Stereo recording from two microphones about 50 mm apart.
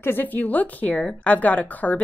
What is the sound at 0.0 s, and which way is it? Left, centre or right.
Speech, left.